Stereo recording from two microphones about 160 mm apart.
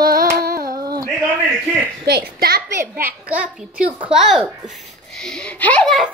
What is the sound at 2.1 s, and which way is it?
Speech, 85° right.